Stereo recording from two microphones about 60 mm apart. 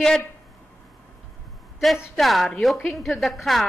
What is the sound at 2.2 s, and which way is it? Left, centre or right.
A woman's voice, centre.